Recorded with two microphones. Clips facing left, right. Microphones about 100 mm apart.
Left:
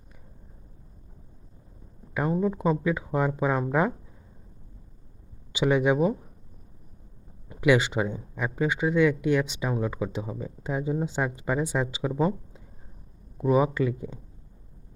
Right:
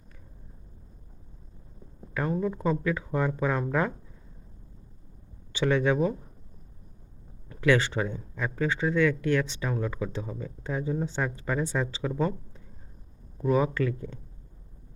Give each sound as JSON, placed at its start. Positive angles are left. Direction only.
{"t": 2.1, "sound": "speech", "side_deg": 15}
{"t": 5.5, "sound": "speech", "side_deg": 15}
{"t": 7.4, "sound": "speech", "side_deg": 15}